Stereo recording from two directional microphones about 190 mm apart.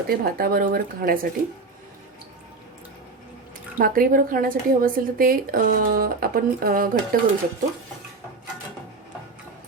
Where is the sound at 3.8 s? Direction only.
50° right (ahead or behind).